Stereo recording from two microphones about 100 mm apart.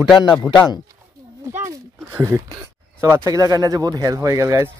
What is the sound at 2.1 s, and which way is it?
Speech, 25° right (ahead or behind).